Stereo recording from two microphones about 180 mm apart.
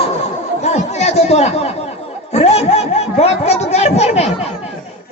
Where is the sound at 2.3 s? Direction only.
35° left (ahead or behind).